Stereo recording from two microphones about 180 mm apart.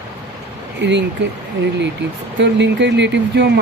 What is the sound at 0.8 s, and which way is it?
Speech, 80° right.